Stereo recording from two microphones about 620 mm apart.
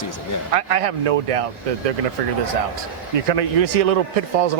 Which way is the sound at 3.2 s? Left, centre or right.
Right.